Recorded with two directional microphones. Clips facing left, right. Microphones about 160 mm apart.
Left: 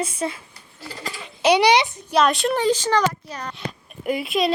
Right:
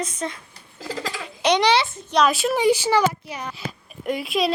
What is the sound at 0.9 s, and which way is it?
Speech, 90° right.